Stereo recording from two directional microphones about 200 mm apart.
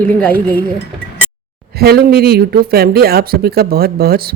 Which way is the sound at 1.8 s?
50° right (ahead or behind).